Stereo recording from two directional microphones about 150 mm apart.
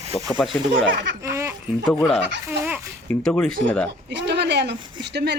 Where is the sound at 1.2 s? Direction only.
20° right (ahead or behind).